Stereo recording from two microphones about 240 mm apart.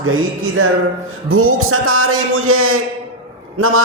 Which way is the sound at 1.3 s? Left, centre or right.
Right.